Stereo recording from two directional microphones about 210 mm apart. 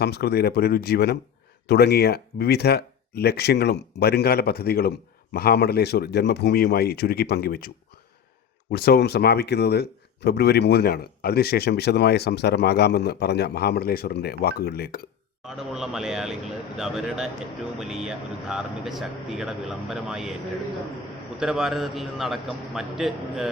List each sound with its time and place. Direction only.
0.0 s speech: 50° left (ahead or behind)
8.7 s speech: 50° left (ahead or behind)
15.4 s speech: centre (ahead or behind)
21.3 s speech: centre (ahead or behind)